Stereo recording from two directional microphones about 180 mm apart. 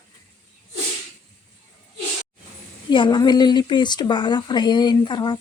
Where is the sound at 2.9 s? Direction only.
25° left (ahead or behind).